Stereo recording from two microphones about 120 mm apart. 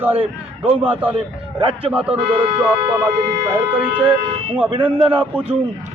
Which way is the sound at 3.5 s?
45° right (ahead or behind).